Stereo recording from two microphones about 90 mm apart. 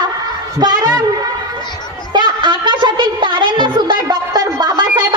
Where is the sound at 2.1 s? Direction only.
60° right (ahead or behind).